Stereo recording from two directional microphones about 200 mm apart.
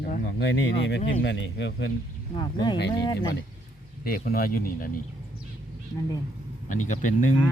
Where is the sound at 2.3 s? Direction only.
20° left (ahead or behind).